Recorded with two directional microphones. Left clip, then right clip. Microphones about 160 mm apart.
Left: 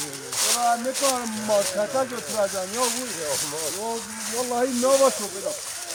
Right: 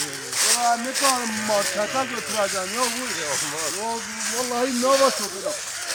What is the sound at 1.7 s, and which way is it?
Speech, 35° left (ahead or behind).